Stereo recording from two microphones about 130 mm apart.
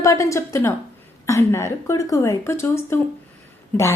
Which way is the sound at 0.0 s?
25° left (ahead or behind).